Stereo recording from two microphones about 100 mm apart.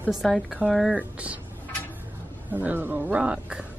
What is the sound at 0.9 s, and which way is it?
Speech, 15° right (ahead or behind).